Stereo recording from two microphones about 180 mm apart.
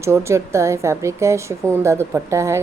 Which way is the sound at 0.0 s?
15° right (ahead or behind).